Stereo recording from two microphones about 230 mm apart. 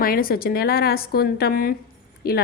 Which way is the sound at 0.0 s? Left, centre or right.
Left.